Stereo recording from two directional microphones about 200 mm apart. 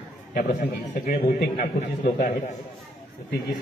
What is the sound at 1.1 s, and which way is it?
A man's voice, 40° left (ahead or behind).